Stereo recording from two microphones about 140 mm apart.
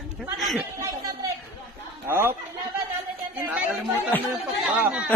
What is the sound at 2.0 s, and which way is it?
Speech, 15° right (ahead or behind).